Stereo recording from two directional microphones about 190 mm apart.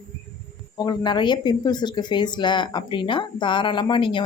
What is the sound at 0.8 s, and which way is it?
A woman's voice, 20° left (ahead or behind).